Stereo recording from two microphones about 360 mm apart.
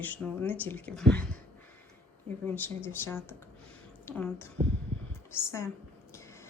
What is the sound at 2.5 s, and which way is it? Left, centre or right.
Speech, centre.